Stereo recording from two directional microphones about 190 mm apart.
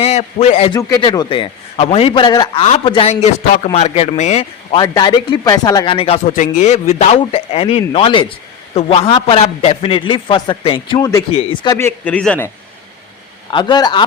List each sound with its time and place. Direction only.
0.0 s a man's voice: 35° left (ahead or behind)
0.7 s a man's voice: 20° left (ahead or behind)
11.8 s speech: 10° left (ahead or behind)
13.5 s a man's voice: 25° left (ahead or behind)